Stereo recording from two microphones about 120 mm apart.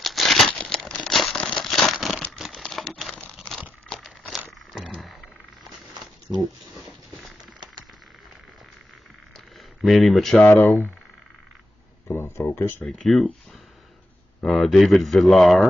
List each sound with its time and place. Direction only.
0.0 s crumpling: centre (ahead or behind)
0.5 s a sound: 5° left (ahead or behind)
2.3 s typewriter: centre (ahead or behind)
3.3 s crumpling: centre (ahead or behind)
4.7 s a sound: 5° right (ahead or behind)
6.3 s speech: 15° right (ahead or behind)
6.6 s a sound: centre (ahead or behind)
9.8 s speech: centre (ahead or behind)
10.4 s speech: 20° left (ahead or behind)
12.1 s a sound: 20° left (ahead or behind)
12.8 s speech: centre (ahead or behind)
14.4 s speech: centre (ahead or behind)